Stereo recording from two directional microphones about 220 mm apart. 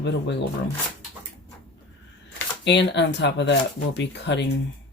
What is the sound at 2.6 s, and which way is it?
Speech, 55° left (ahead or behind).